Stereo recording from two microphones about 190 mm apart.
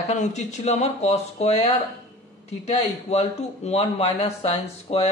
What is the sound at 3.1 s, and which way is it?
Speech, 35° left (ahead or behind).